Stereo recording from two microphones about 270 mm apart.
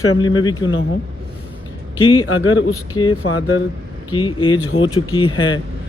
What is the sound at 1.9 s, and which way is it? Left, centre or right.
Speech, centre.